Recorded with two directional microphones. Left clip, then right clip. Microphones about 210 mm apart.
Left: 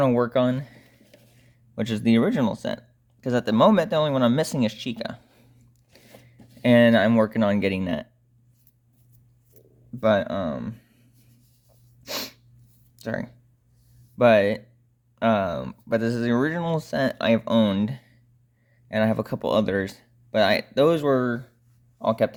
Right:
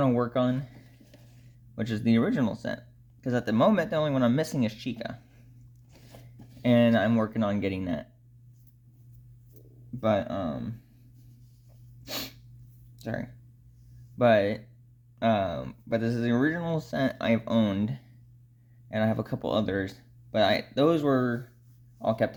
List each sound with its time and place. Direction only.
0.0 s a sound: 40° left (ahead or behind)
1.7 s speech: 35° left (ahead or behind)
10.0 s speech: 40° left (ahead or behind)
12.0 s sneeze: 40° left (ahead or behind)
13.0 s speech: 35° left (ahead or behind)